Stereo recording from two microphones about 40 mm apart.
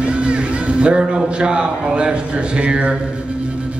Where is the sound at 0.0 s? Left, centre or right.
Right.